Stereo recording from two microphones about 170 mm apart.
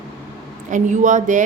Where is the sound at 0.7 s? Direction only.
45° right (ahead or behind).